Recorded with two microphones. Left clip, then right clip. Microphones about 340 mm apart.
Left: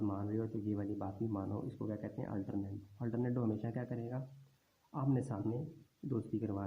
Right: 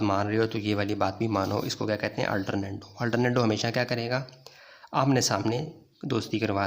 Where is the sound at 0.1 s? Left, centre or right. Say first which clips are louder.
Right 15 dB; right.